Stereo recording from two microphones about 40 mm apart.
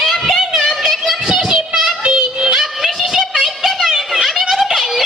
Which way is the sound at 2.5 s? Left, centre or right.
Centre.